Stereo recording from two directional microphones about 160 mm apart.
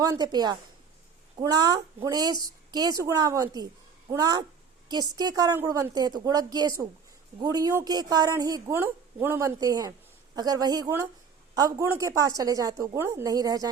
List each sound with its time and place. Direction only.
0.0 s a woman's voice: 25° right (ahead or behind)